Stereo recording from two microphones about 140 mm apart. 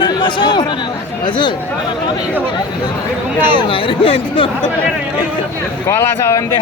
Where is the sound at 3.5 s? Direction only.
35° left (ahead or behind).